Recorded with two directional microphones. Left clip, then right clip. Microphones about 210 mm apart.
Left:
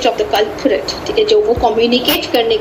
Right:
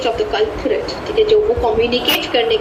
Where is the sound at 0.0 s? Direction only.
50° left (ahead or behind).